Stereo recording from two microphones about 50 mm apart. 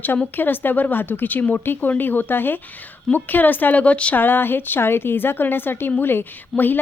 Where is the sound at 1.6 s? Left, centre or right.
Left.